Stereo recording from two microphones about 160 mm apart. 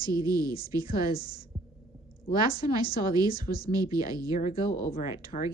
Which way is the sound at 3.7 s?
25° right (ahead or behind).